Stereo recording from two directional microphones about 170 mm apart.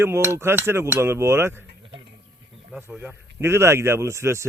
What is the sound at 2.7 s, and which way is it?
Speech, 10° right (ahead or behind).